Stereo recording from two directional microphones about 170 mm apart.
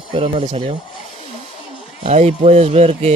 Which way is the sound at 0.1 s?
40° right (ahead or behind).